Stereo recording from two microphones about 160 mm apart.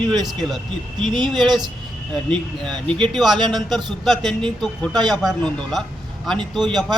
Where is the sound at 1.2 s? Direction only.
30° right (ahead or behind).